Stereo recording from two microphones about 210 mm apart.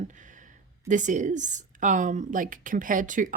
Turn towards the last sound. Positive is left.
turn(degrees=-40)  # may be behind; listen again after turning